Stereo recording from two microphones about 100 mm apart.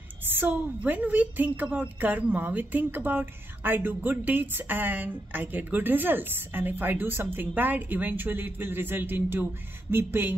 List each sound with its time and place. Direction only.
0.3 s a woman's voice: 20° right (ahead or behind)